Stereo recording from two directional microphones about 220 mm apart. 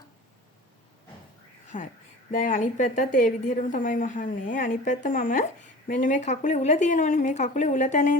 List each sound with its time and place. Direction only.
1.7 s a woman's voice: 35° left (ahead or behind)